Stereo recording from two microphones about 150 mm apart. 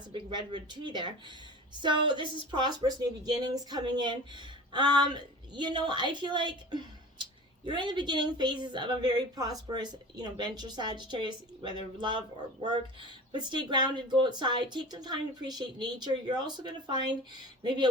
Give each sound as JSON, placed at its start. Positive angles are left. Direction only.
{"t": 0.1, "sound": "a woman's voice", "side_deg": -30}